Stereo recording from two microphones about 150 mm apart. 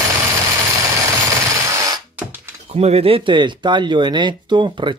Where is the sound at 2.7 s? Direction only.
40° right (ahead or behind).